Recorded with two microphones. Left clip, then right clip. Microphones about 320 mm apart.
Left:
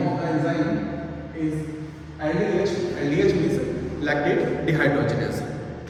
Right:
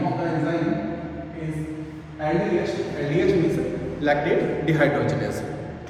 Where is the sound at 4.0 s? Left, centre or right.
Centre.